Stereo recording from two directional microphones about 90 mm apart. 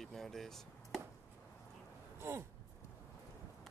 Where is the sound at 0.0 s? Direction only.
5° left (ahead or behind).